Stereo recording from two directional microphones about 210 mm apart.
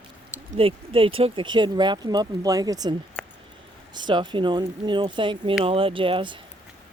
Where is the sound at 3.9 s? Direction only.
20° right (ahead or behind).